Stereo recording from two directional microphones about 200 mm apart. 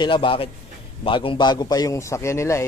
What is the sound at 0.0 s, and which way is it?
A man's voice, 25° left (ahead or behind).